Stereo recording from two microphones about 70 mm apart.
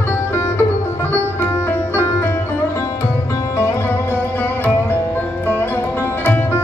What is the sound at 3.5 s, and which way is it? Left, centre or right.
Music, left.